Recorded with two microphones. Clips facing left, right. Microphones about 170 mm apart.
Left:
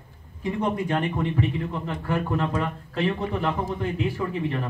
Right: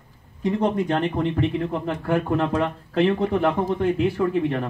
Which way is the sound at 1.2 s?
55° right (ahead or behind).